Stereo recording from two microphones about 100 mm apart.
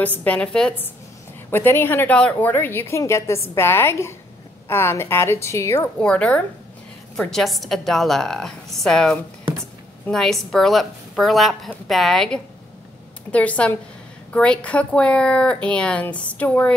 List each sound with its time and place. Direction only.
0.2 s a woman's voice: 10° left (ahead or behind)
1.5 s a woman's voice: 20° left (ahead or behind)
5.9 s a woman's voice: 10° left (ahead or behind)
13.3 s a woman's voice: 15° left (ahead or behind)